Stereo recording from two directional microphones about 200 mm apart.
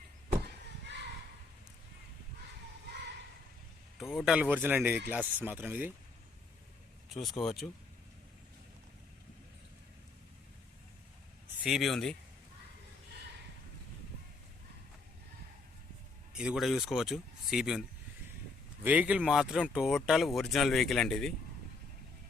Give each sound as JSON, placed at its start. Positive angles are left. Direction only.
{"t": 0.4, "sound": "vehicle", "side_deg": -60}
{"t": 2.9, "sound": "a sound", "side_deg": -55}
{"t": 3.9, "sound": "speech", "side_deg": 0}
{"t": 7.1, "sound": "speech", "side_deg": 0}
{"t": 11.6, "sound": "speech", "side_deg": 0}
{"t": 16.4, "sound": "speech", "side_deg": 0}